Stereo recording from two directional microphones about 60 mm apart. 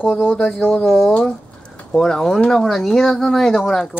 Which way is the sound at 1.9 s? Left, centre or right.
Centre.